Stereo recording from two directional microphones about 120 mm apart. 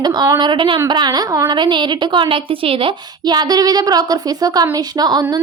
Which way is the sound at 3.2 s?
35° right (ahead or behind).